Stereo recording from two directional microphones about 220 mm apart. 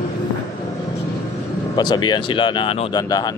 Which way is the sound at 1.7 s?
20° left (ahead or behind).